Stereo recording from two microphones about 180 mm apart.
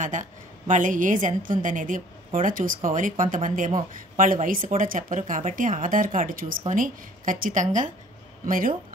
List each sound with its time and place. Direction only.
0.0 s a woman's voice: 45° right (ahead or behind)